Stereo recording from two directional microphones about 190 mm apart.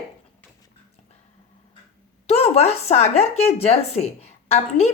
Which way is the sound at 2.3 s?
30° left (ahead or behind).